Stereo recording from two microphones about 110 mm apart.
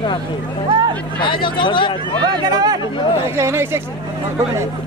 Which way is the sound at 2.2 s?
40° right (ahead or behind).